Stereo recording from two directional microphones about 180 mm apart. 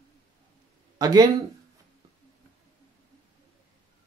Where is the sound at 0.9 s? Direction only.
20° right (ahead or behind).